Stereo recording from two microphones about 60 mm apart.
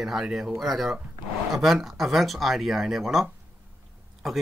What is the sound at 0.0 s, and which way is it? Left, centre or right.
Speech, centre.